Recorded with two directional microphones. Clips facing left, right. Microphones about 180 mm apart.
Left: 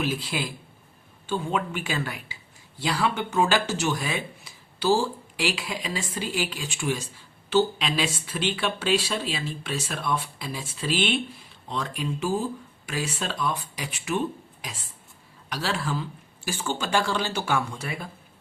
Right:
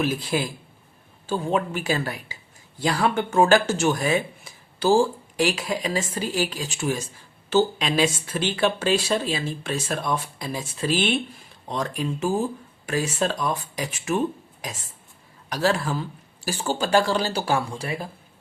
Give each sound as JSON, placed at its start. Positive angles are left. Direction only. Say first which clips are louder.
{"t": 0.0, "sound": "speech", "louder": "right 4 dB", "side_deg": -45}
{"t": 15.4, "sound": "speech", "louder": "right 6 dB", "side_deg": -45}